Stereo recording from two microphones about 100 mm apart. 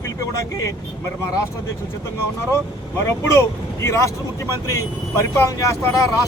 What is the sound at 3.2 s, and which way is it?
Speech, 30° left (ahead or behind).